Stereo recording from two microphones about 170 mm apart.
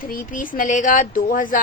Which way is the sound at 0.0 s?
55° left (ahead or behind).